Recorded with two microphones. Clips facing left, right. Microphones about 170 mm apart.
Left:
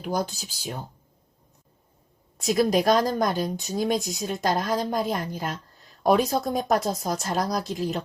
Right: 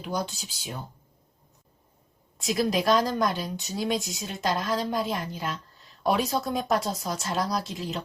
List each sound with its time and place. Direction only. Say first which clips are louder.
0.0 s a woman's voice: left 3 dB; 45° left (ahead or behind)
2.4 s a woman's voice: left 4 dB; 45° left (ahead or behind)